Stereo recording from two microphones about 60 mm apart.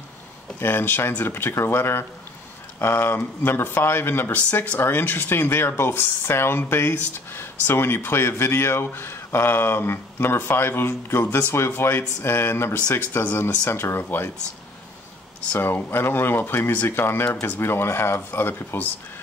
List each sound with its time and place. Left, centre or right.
0.6 s speech: left
13.5 s speech: left
15.6 s speech: left